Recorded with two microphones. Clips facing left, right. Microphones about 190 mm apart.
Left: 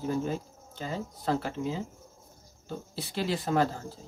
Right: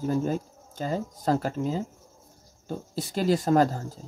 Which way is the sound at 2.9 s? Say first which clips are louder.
Right 7 dB; 45° right (ahead or behind).